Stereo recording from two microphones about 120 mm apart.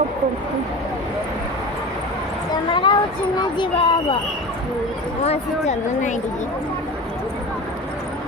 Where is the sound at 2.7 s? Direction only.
40° left (ahead or behind).